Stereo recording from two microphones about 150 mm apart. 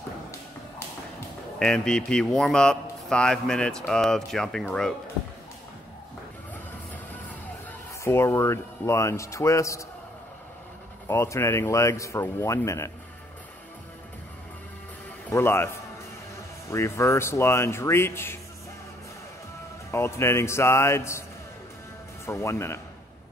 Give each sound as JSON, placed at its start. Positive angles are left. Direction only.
{"t": 1.6, "sound": "a man's voice", "side_deg": 5}
{"t": 8.0, "sound": "speech", "side_deg": 15}
{"t": 11.1, "sound": "speech", "side_deg": 20}
{"t": 15.3, "sound": "speech", "side_deg": 15}
{"t": 19.9, "sound": "speech", "side_deg": 20}
{"t": 22.2, "sound": "speech", "side_deg": 20}